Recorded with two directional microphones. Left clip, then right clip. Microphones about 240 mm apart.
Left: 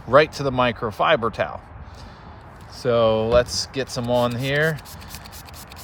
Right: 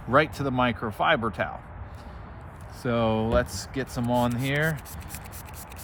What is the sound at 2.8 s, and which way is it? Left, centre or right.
Speech, left.